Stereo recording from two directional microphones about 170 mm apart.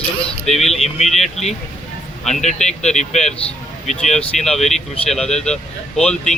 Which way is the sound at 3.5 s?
Centre (ahead or behind).